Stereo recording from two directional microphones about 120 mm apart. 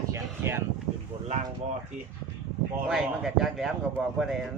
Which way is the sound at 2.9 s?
Centre (ahead or behind).